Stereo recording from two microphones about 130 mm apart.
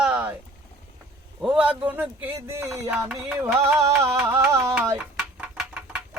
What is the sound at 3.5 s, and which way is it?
Music, 20° right (ahead or behind).